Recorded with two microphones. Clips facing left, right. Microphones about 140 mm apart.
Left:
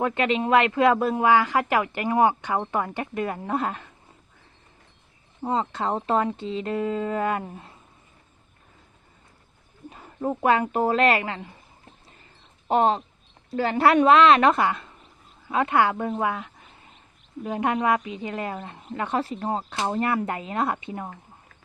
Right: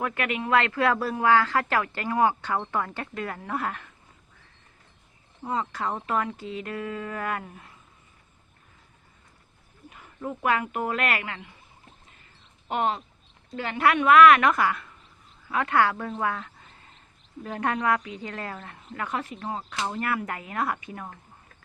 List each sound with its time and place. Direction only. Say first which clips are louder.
0.0 s speech: left 6 dB; 25° left (ahead or behind)
5.4 s speech: left 4 dB; 30° left (ahead or behind)
9.9 s speech: left 7 dB; 35° left (ahead or behind)
12.6 s speech: left 6 dB; 35° left (ahead or behind)